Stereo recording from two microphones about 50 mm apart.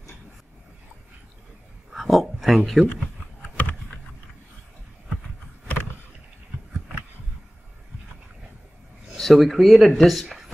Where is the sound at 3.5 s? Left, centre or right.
Left.